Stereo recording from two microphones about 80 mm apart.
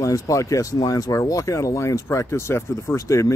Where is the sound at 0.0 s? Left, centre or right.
Left.